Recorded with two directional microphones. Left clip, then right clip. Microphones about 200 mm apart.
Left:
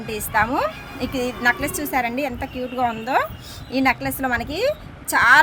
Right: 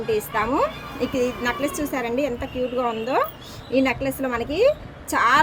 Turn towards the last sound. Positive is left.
turn(degrees=55)  # may be behind; listen again after turning